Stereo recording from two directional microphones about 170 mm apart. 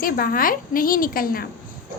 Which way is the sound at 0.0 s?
60° left (ahead or behind).